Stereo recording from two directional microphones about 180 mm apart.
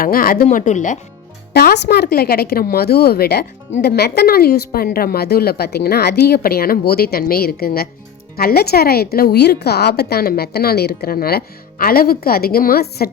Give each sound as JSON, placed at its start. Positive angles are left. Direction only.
{"t": 0.0, "sound": "speech", "side_deg": 55}
{"t": 0.4, "sound": "speech", "side_deg": 40}
{"t": 1.5, "sound": "a woman's voice", "side_deg": 65}